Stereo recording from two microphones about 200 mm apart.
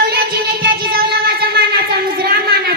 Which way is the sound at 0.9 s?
55° right (ahead or behind).